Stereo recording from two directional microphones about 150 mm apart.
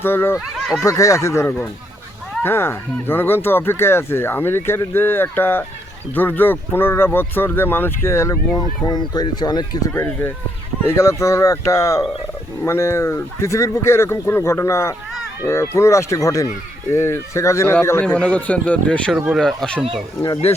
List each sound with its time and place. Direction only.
0.0 s speech: 15° left (ahead or behind)
0.3 s speech: centre (ahead or behind)
0.9 s speech: 20° left (ahead or behind)
9.9 s speech: 15° left (ahead or behind)